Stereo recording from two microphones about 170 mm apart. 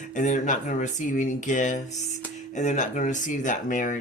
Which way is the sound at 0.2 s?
45° left (ahead or behind).